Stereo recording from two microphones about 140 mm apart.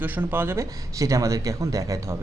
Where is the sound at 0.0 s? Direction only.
15° right (ahead or behind).